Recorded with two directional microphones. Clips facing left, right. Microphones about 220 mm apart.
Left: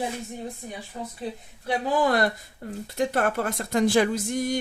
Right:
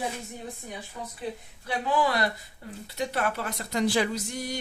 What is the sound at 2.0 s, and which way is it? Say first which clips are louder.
Speech: left 4 dB; 50° left (ahead or behind).